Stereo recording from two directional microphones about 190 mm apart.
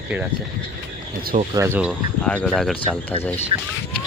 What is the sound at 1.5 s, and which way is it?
Speech, 10° right (ahead or behind).